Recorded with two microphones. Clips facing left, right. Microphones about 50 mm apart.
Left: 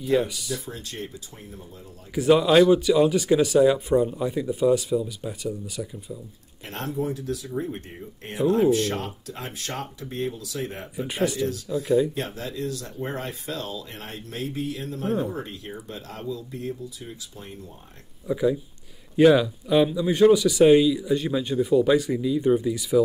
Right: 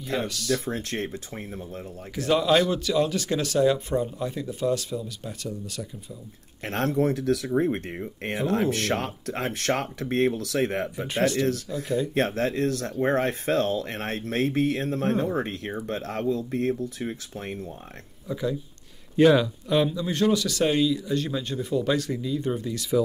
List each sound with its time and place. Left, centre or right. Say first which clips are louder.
0.0 s a man's voice: left 6 dB; centre
0.7 s speech: right 6 dB; right
2.1 s a man's voice: left 4 dB; centre
6.6 s speech: right 5 dB; right
18.2 s a man's voice: left 5 dB; centre